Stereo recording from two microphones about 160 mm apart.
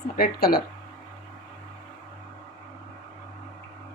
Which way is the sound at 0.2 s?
70° left (ahead or behind).